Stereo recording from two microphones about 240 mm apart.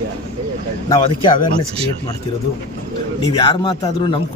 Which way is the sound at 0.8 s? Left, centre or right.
Centre.